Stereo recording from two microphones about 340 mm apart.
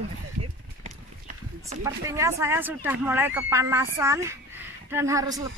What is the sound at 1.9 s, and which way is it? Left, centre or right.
Speech, centre.